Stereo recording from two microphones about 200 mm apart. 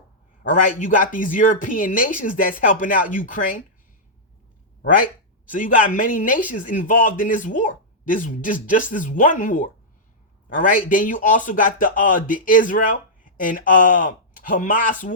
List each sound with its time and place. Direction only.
0.7 s speech: 45° left (ahead or behind)
5.5 s a man's voice: 40° left (ahead or behind)